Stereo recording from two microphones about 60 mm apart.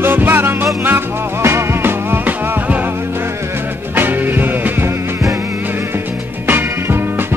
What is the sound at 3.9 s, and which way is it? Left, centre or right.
Music, right.